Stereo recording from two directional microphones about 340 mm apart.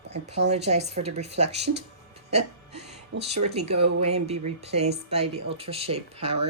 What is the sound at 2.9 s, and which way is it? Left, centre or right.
Speech, centre.